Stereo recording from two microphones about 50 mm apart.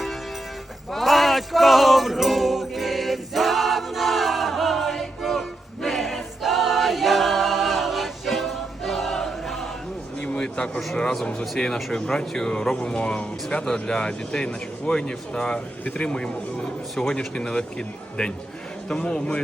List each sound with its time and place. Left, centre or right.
0.9 s music: centre
10.2 s a sound: left
11.5 s a man's voice: centre